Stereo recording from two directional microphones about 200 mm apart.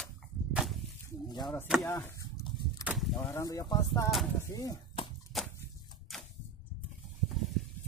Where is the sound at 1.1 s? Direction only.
20° left (ahead or behind).